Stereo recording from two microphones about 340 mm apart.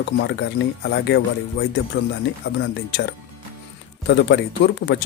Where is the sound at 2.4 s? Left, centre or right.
Left.